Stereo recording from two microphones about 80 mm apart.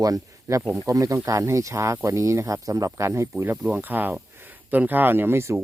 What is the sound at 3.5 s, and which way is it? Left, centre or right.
Speech, right.